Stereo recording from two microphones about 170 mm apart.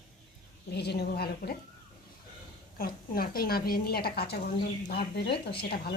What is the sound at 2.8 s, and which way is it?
A woman's voice, 60° left (ahead or behind).